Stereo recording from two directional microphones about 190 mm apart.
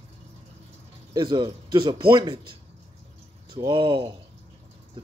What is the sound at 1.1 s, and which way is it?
Speech, 25° right (ahead or behind).